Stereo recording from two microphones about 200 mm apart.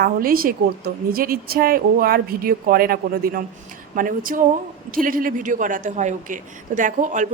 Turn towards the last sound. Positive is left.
turn(degrees=-40)  # may be behind; listen again after turning